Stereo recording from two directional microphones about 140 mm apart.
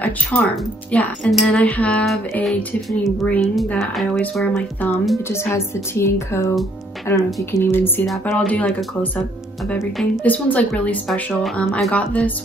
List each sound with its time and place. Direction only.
0.0 s speech: 10° left (ahead or behind)
1.3 s music: 10° left (ahead or behind)
3.3 s speech: 5° left (ahead or behind)
10.2 s speech: 10° left (ahead or behind)